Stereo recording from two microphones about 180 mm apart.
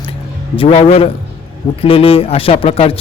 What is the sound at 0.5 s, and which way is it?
A man's voice, 30° left (ahead or behind).